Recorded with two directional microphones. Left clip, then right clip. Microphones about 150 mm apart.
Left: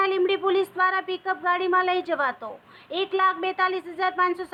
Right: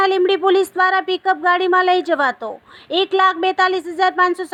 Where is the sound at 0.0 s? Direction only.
45° right (ahead or behind).